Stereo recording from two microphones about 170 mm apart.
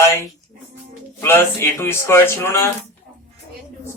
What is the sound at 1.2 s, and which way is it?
Speech, 15° left (ahead or behind).